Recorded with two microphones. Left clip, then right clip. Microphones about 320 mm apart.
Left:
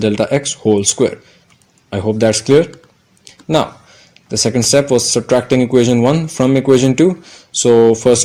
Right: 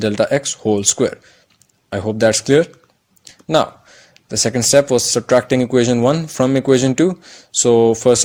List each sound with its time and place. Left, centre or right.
0.0 s speech: right